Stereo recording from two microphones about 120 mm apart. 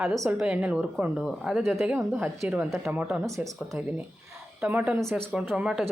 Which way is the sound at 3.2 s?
25° right (ahead or behind).